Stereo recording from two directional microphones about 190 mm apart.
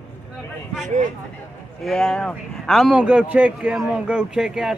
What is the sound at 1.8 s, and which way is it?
Speech, centre (ahead or behind).